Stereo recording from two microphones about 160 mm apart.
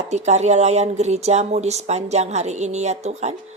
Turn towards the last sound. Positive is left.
turn(degrees=-45)  # may be behind; listen again after turning